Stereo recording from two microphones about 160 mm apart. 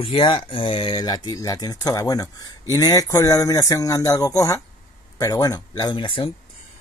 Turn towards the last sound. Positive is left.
turn(degrees=35)  # may be behind; listen again after turning